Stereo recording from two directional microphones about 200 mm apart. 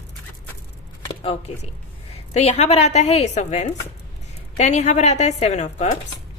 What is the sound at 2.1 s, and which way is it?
A woman's voice, 30° left (ahead or behind).